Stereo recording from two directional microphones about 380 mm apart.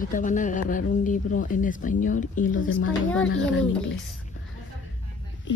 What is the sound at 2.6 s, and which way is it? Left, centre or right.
A child's voice, left.